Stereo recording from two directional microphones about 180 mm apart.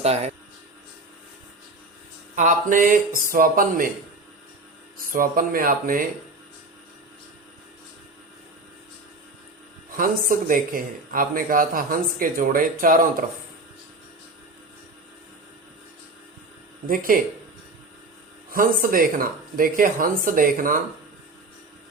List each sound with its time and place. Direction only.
0.0 s speech: 35° right (ahead or behind)
2.3 s speech: 45° right (ahead or behind)
5.1 s speech: 50° right (ahead or behind)
10.0 s speech: 50° right (ahead or behind)
16.9 s speech: 50° right (ahead or behind)
18.5 s speech: 50° right (ahead or behind)